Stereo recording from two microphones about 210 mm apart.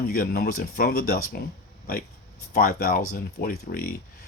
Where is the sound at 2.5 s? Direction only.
45° left (ahead or behind).